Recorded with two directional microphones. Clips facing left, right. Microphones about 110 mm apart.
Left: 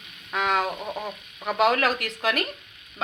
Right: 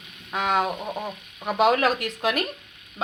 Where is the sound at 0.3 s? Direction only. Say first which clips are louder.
Right 1 dB; 35° right (ahead or behind).